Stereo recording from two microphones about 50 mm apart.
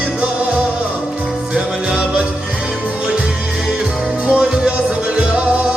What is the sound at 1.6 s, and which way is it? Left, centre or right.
Music, centre.